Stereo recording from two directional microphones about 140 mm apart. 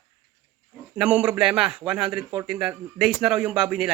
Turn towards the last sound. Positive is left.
turn(degrees=-10)  # may be behind; listen again after turning